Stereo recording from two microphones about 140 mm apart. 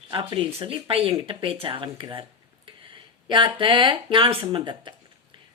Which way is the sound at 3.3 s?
35° right (ahead or behind).